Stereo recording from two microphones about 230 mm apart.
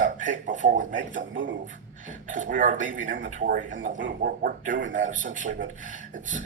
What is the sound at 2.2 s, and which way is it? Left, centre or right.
A man's voice, right.